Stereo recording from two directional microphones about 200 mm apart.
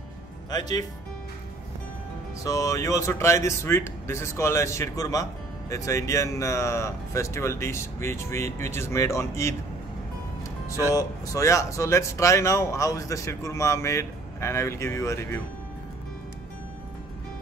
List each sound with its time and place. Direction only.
0.5 s speech: 20° left (ahead or behind)
2.4 s speech: 15° left (ahead or behind)
10.9 s speech: 15° left (ahead or behind)